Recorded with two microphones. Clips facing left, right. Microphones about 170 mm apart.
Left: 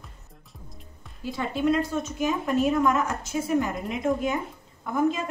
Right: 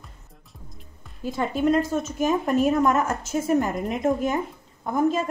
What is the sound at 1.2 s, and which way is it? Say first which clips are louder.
A woman's voice: right 3 dB; 45° right (ahead or behind).